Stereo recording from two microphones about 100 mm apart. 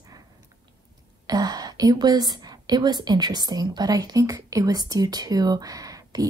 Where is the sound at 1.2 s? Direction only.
40° right (ahead or behind).